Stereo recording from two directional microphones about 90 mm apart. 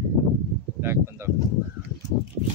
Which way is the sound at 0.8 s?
30° right (ahead or behind).